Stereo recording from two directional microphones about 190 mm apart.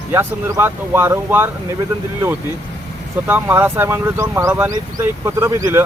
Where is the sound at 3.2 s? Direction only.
10° right (ahead or behind).